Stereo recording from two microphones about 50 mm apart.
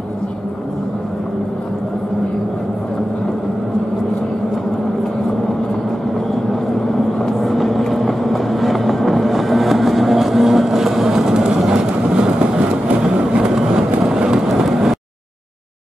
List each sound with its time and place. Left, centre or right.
7.2 s vehicle: centre
11.7 s vehicle: centre